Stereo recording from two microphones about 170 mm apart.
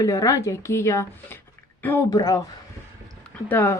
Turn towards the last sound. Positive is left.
turn(degrees=10)  # may be behind; listen again after turning